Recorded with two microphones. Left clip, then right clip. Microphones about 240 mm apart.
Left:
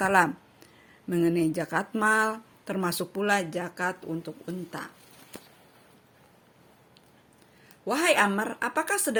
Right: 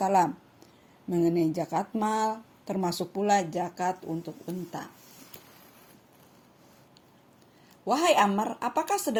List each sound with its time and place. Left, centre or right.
0.0 s a sound: left
1.1 s speech: left
7.9 s speech: left